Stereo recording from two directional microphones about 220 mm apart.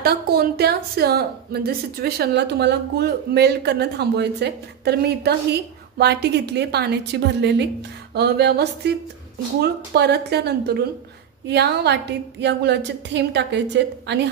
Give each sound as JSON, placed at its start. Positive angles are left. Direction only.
{"t": 0.0, "sound": "a woman's voice", "side_deg": -45}